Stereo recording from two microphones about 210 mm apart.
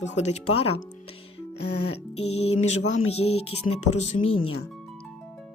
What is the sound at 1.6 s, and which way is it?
Music, 55° left (ahead or behind).